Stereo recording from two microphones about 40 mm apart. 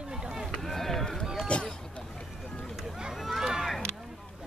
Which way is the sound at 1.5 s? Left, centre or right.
Left.